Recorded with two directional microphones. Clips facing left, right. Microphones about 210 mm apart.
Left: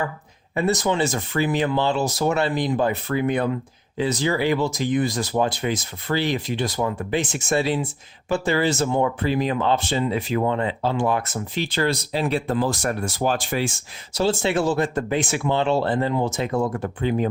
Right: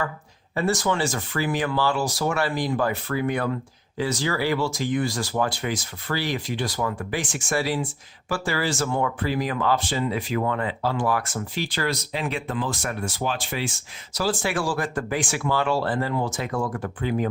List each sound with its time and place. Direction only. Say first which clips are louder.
0.5 s speech: left 2 dB; 20° left (ahead or behind); by 13.7 s 45° left (ahead or behind)
14.1 s speech: left 4 dB; 25° left (ahead or behind)